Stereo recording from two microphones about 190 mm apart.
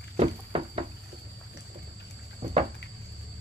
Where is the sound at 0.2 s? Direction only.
30° right (ahead or behind).